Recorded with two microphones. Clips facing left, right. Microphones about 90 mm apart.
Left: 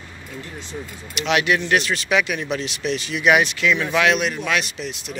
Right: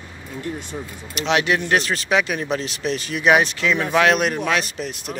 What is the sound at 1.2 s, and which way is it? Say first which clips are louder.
Speech: even; 30° right (ahead or behind).